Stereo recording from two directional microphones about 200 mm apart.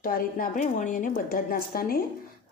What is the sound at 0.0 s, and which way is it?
A woman's voice, 45° left (ahead or behind).